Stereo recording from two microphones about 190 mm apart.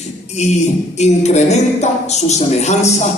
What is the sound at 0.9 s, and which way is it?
A woman's voice, 35° left (ahead or behind).